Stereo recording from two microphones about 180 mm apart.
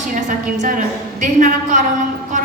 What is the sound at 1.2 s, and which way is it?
Speech, 45° right (ahead or behind).